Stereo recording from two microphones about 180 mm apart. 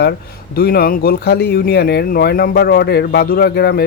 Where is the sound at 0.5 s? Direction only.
60° left (ahead or behind).